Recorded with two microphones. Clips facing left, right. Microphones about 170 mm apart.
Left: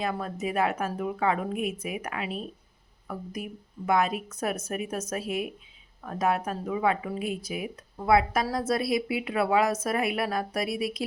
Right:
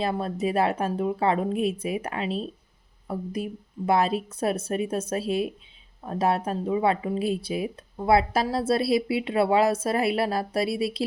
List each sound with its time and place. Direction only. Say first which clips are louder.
0.0 s a woman's voice: right 4 dB; 30° right (ahead or behind)